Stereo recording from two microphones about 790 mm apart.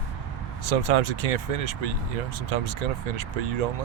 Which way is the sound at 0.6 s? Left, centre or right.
Right.